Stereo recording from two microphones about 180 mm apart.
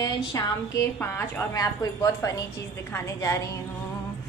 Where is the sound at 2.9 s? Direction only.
15° left (ahead or behind).